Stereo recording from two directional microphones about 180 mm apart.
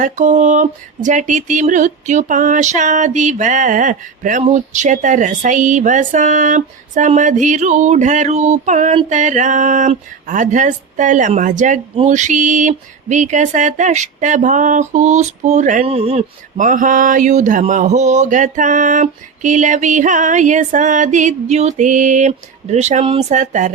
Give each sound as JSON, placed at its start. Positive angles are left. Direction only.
{"t": 0.0, "sound": "speech", "side_deg": -40}